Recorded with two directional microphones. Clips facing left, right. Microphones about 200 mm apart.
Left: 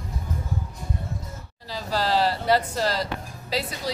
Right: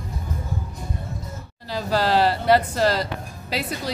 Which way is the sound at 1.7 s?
60° right (ahead or behind).